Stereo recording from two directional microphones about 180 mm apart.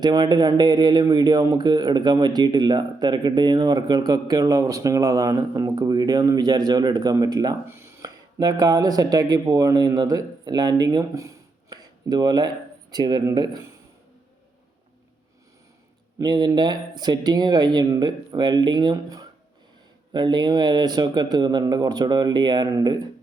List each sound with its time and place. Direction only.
0.0 s speech: 20° right (ahead or behind)
16.1 s speech: 25° right (ahead or behind)